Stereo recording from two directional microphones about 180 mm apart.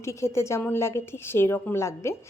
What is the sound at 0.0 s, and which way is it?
Speech, 15° left (ahead or behind).